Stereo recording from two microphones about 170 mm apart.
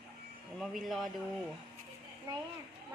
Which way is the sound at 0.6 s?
Centre (ahead or behind).